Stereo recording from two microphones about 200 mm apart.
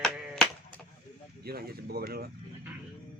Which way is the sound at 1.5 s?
50° right (ahead or behind).